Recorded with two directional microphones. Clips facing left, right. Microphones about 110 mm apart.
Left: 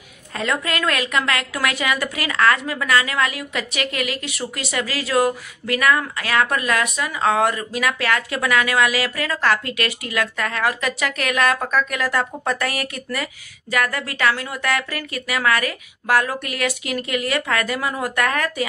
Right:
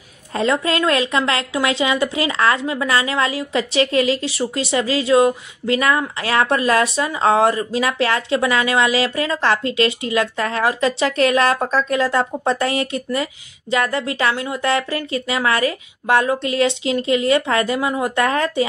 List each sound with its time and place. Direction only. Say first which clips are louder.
0.3 s a woman's voice: right 5 dB; 25° right (ahead or behind)